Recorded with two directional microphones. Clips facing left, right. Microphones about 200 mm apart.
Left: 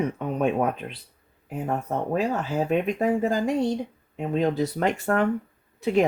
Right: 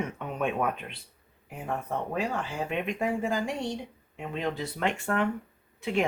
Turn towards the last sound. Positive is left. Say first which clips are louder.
# left 7 dB
turn(degrees=40)  # may be behind; listen again after turning